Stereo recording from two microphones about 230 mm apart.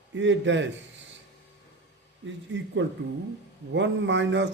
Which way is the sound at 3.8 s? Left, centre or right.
Right.